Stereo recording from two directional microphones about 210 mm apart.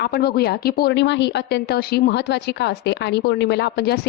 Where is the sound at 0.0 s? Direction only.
50° left (ahead or behind).